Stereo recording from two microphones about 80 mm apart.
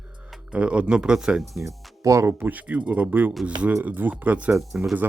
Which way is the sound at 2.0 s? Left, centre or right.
Right.